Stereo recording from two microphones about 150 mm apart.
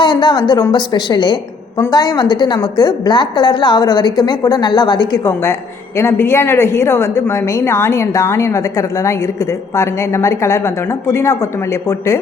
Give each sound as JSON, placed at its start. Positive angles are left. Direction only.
{"t": 0.0, "sound": "a woman's voice", "side_deg": 30}
{"t": 9.7, "sound": "a woman's voice", "side_deg": 20}